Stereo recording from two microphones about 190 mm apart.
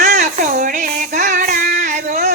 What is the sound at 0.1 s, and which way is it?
Child singing, 40° right (ahead or behind).